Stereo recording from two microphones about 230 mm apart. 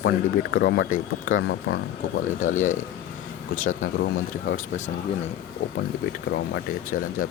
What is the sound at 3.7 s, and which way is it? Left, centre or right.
Speech, left.